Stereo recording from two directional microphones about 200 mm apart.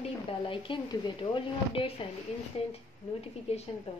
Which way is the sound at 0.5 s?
25° left (ahead or behind).